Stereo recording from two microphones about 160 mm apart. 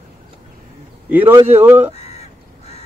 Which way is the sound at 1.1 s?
10° right (ahead or behind).